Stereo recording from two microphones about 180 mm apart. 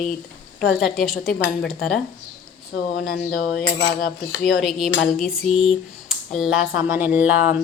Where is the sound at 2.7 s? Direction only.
60° left (ahead or behind).